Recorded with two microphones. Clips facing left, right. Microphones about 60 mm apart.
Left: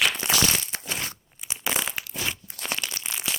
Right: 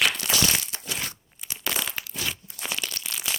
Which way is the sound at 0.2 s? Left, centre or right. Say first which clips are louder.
Left 2 dB; left.